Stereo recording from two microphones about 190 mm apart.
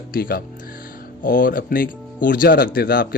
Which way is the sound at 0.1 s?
50° left (ahead or behind).